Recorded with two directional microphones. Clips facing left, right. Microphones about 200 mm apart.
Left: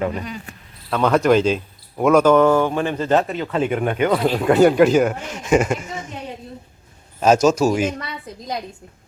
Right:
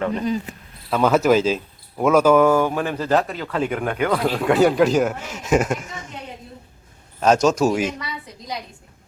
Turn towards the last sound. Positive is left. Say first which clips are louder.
# left 2 dB
turn(degrees=0)  # may be behind; listen again after turning